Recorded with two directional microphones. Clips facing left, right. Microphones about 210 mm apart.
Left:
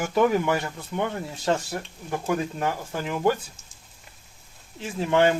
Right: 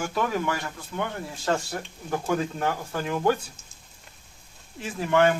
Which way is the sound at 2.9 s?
15° left (ahead or behind).